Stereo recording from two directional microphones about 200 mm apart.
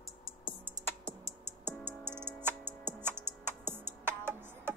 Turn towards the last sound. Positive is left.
turn(degrees=-10)  # may be behind; listen again after turning